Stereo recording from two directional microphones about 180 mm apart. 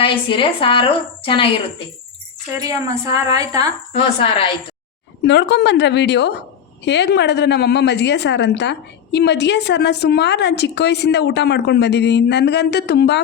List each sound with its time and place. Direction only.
0.0 s a woman's voice: 30° left (ahead or behind)
2.6 s speech: 20° right (ahead or behind)
3.9 s a woman's voice: 30° left (ahead or behind)
5.2 s a woman's voice: 80° left